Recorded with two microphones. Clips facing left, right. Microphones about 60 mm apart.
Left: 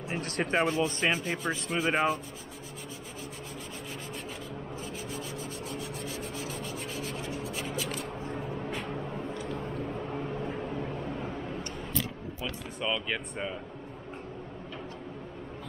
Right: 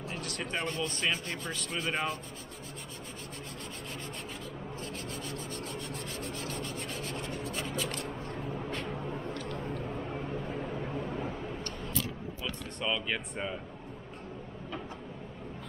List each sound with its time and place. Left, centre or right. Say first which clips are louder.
0.1 s a sound: left 6 dB; left
0.6 s speech: left 7 dB; centre
1.7 s rub: left 6 dB; centre
4.8 s rub: left 1 dB; centre
8.2 s vehicle: left 2 dB; centre
12.8 s rub: left 1 dB; centre